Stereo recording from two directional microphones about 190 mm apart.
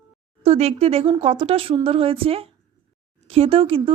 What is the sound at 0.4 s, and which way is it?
Speech, 35° right (ahead or behind).